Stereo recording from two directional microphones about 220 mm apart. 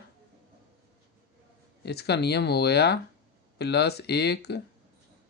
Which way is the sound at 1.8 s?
50° left (ahead or behind).